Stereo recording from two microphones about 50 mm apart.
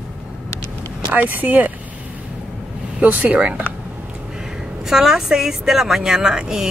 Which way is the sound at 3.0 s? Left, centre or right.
Right.